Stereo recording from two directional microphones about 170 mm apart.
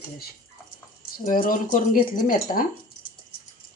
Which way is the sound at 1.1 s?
55° left (ahead or behind).